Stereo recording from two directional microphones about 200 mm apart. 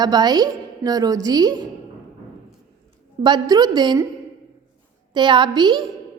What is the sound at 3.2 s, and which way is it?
Speech, 20° right (ahead or behind).